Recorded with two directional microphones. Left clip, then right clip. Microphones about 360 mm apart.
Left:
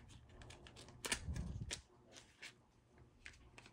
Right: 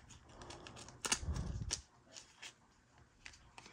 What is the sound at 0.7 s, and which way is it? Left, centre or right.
Typewriter, centre.